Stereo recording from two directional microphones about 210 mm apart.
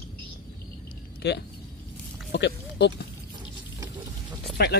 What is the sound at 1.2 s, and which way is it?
Speech, 50° left (ahead or behind).